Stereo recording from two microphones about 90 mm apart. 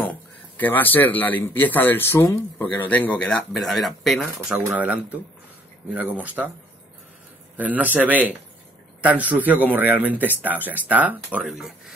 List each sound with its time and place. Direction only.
0.1 s a sound: 20° left (ahead or behind)
1.4 s speech: 20° left (ahead or behind)
3.3 s speech: 5° left (ahead or behind)
4.7 s speech: 20° right (ahead or behind)
7.5 s speech: 20° right (ahead or behind)
11.4 s speech: 5° right (ahead or behind)